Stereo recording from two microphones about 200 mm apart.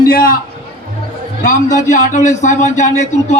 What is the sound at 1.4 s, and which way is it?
Speech, 40° left (ahead or behind).